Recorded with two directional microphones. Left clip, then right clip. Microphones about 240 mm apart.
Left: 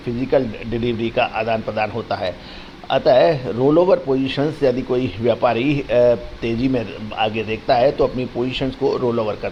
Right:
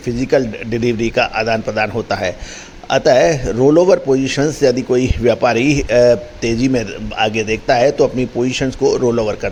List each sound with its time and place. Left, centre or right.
0.2 s speech: right
8.0 s speech: right